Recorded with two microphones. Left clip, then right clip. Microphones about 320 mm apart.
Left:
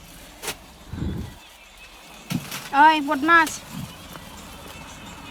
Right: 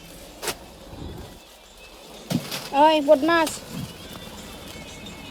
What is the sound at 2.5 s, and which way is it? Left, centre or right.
Speech, centre.